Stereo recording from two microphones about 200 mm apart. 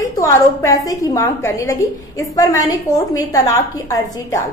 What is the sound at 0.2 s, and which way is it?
A woman's voice, 15° left (ahead or behind).